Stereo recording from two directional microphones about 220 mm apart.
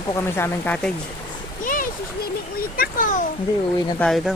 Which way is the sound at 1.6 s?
35° left (ahead or behind).